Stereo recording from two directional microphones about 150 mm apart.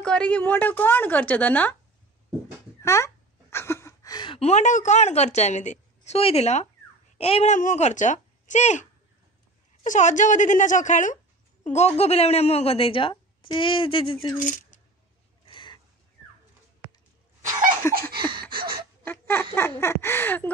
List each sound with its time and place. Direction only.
0.0 s a woman's voice: 5° left (ahead or behind)
2.8 s a sound: 20° left (ahead or behind)
4.4 s a woman's voice: 50° left (ahead or behind)
7.5 s speech: 55° left (ahead or behind)
9.8 s a woman's voice: 55° left (ahead or behind); by 14.2 s 35° left (ahead or behind)
14.7 s a sound: 60° left (ahead or behind)
15.4 s a sound: 30° left (ahead or behind)
17.4 s laughter: 55° right (ahead or behind)
19.0 s laughter: 15° left (ahead or behind)
19.5 s a woman's voice: 15° left (ahead or behind)